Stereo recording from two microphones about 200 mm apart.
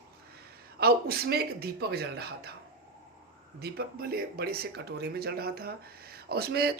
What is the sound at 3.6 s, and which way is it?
Speech, 50° right (ahead or behind).